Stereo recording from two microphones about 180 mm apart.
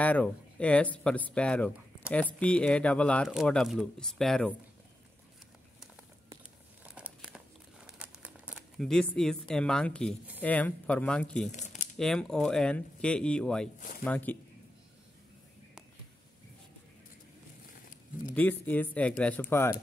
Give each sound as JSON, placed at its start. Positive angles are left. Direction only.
{"t": 0.0, "sound": "speech", "side_deg": 10}
{"t": 6.8, "sound": "crumpling", "side_deg": -5}
{"t": 10.4, "sound": "speech", "side_deg": 10}
{"t": 11.5, "sound": "speech", "side_deg": 40}
{"t": 12.0, "sound": "speech", "side_deg": 5}
{"t": 13.7, "sound": "speech", "side_deg": 50}
{"t": 14.0, "sound": "speech", "side_deg": 10}
{"t": 18.3, "sound": "speech", "side_deg": 10}